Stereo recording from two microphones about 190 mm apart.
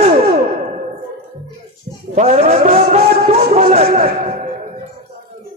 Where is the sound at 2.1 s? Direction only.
35° right (ahead or behind).